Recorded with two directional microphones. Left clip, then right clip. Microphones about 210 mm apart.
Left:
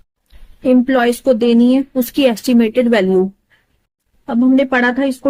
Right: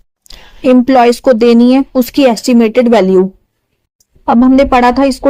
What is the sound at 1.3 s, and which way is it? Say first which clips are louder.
Speech: right 5 dB; 25° right (ahead or behind).